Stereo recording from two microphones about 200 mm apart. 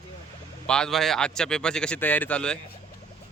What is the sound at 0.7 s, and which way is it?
A man's voice, centre (ahead or behind).